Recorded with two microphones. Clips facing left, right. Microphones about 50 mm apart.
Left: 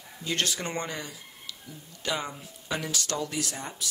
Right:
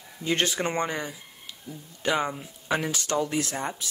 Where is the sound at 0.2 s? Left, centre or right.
Right.